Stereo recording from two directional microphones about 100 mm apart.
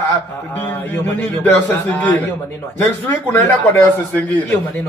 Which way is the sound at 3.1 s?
20° left (ahead or behind).